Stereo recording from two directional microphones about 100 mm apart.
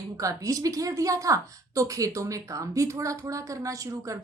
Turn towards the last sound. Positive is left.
turn(degrees=-35)  # may be behind; listen again after turning